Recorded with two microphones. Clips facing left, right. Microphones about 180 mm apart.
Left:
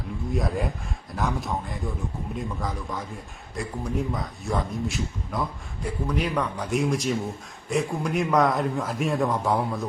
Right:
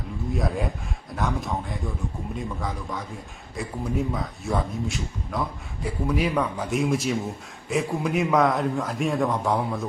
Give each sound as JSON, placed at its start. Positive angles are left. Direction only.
{"t": 0.3, "sound": "a man's voice", "side_deg": 0}